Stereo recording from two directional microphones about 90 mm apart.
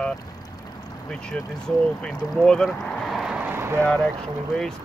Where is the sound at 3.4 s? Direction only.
25° right (ahead or behind).